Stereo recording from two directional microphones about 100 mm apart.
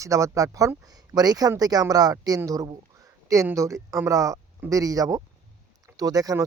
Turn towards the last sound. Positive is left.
turn(degrees=-40)  # may be behind; listen again after turning